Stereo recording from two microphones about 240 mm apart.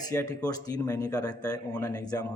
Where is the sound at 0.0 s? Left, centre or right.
Centre.